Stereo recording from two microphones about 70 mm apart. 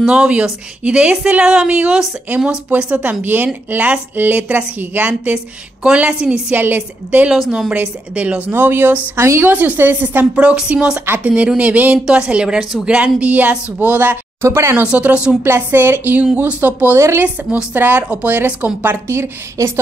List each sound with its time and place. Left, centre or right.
0.0 s a woman's voice: centre
6.5 s a woman's voice: right
8.5 s a woman's voice: right
14.4 s a woman's voice: right
14.8 s a woman's voice: centre
15.4 s a woman's voice: right
16.9 s a woman's voice: right